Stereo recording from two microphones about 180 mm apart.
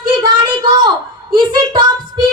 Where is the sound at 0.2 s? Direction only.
25° right (ahead or behind).